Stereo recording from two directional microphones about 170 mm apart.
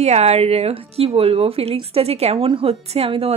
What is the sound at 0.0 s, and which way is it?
Speech, 40° right (ahead or behind).